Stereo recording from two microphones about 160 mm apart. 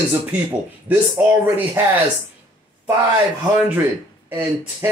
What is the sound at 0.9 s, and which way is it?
Speech, 10° right (ahead or behind).